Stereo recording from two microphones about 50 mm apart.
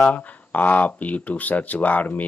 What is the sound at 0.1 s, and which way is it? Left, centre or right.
Speech, left.